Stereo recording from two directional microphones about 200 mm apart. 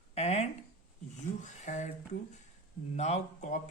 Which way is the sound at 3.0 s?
35° left (ahead or behind).